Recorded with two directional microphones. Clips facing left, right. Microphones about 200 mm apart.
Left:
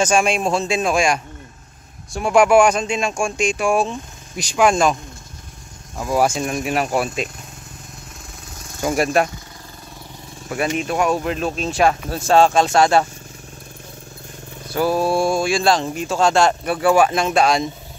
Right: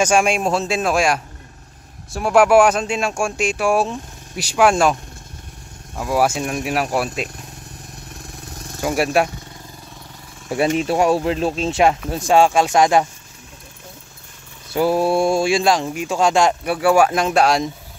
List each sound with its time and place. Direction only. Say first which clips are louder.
0.0 s speech: right 1 dB; 10° right (ahead or behind)
6.1 s speech: even; 5° right (ahead or behind)
8.5 s vehicle: right 4 dB; 35° right (ahead or behind)
8.8 s speech: even; 5° right (ahead or behind)
10.8 s speech: right 3 dB; 30° right (ahead or behind); by 13.0 s 15° right (ahead or behind)
14.7 s speech: right 1 dB; 25° right (ahead or behind)
15.6 s speech: even; 10° right (ahead or behind)